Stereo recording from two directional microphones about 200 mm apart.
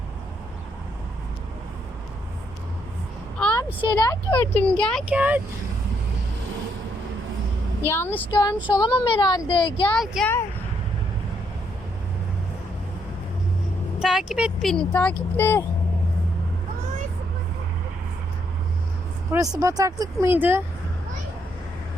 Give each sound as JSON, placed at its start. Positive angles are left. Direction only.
{"t": 3.3, "sound": "a sound", "side_deg": 5}
{"t": 3.8, "sound": "speech", "side_deg": 20}
{"t": 4.3, "sound": "speech", "side_deg": 10}
{"t": 5.0, "sound": "speech", "side_deg": -5}
{"t": 7.9, "sound": "speech", "side_deg": 10}
{"t": 8.3, "sound": "speech", "side_deg": 20}
{"t": 9.9, "sound": "speech", "side_deg": 0}
{"t": 14.0, "sound": "speech", "side_deg": 0}
{"t": 19.5, "sound": "speech", "side_deg": -15}